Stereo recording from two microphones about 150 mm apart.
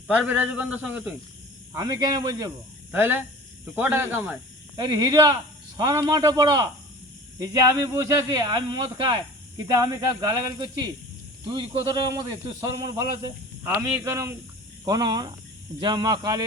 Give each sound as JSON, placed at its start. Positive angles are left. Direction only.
{"t": 0.1, "sound": "a man's voice", "side_deg": -10}
{"t": 1.7, "sound": "speech", "side_deg": -25}
{"t": 2.9, "sound": "a man's voice", "side_deg": -15}
{"t": 4.8, "sound": "a man's voice", "side_deg": -25}
{"t": 14.8, "sound": "speech", "side_deg": -30}